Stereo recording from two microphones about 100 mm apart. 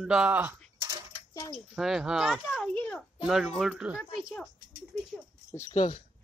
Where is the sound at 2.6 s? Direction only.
10° left (ahead or behind).